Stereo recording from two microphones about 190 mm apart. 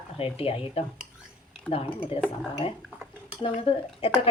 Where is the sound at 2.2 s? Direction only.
35° left (ahead or behind).